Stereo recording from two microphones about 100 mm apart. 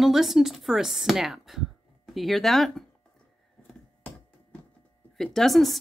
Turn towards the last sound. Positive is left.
turn(degrees=0)  # may be behind; listen again after turning